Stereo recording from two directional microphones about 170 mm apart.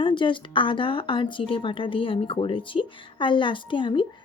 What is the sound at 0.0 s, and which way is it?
Speech, 30° left (ahead or behind).